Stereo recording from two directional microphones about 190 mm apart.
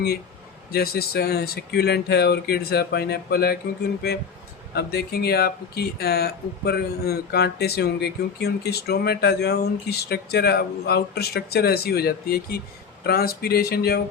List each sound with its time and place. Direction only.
0.7 s speech: 55° left (ahead or behind)
4.7 s speech: 55° left (ahead or behind)